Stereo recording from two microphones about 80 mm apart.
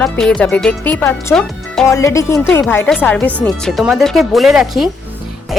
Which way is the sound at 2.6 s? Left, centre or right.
Left.